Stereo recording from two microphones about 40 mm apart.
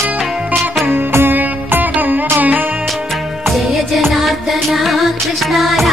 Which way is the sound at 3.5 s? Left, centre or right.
Centre.